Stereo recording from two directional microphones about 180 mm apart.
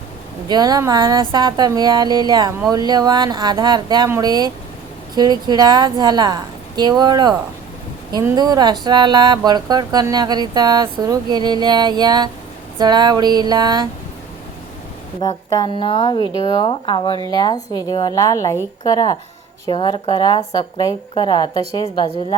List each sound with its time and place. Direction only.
0.4 s speech: 20° right (ahead or behind)
15.2 s speech: 20° left (ahead or behind)